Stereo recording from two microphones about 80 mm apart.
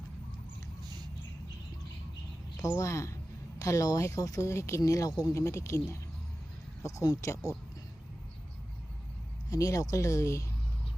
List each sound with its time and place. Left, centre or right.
2.6 s speech: left
4.8 s speech: left
5.3 s speech: left
9.5 s speech: left